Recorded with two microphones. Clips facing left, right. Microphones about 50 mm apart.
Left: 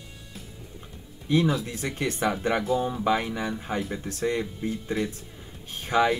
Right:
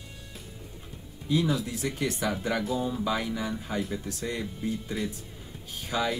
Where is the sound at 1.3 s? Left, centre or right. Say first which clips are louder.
Left 3 dB; left.